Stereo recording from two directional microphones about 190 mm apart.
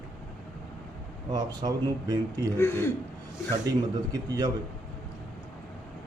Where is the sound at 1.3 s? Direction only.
20° right (ahead or behind).